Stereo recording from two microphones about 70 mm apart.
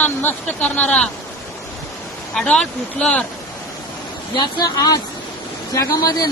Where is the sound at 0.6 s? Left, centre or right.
Centre.